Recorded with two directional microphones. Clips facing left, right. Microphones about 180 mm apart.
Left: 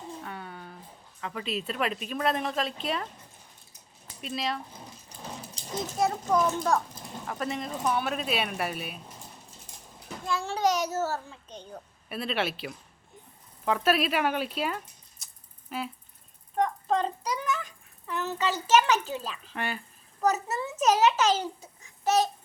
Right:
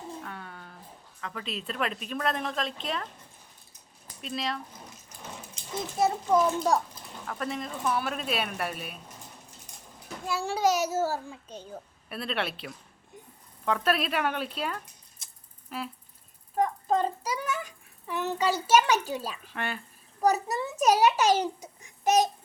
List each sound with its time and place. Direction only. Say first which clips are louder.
0.3 s a sound: left 2 dB; 5° left (ahead or behind)
1.2 s a woman's voice: left 4 dB; 5° left (ahead or behind)
4.2 s a woman's voice: left 1 dB; centre (ahead or behind)
5.6 s children playing: left 3 dB; 35° left (ahead or behind)
6.0 s a woman's voice: right 2 dB; 5° right (ahead or behind)
10.2 s a child's voice: right 1 dB; 10° right (ahead or behind)
15.2 s a sound: even; centre (ahead or behind)
15.7 s a woman's voice: left 2 dB; centre (ahead or behind)
19.5 s a woman's voice: left 1 dB; centre (ahead or behind)
20.2 s a child's voice: right 2 dB; 15° right (ahead or behind)